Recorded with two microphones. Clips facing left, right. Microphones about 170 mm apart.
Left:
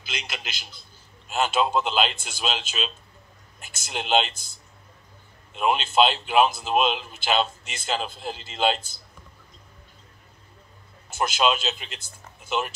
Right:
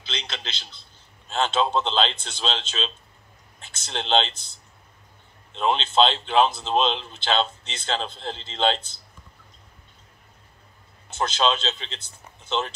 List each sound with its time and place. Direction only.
0.0 s a man's voice: 10° left (ahead or behind)
5.5 s speech: 10° left (ahead or behind)
11.1 s speech: 10° left (ahead or behind)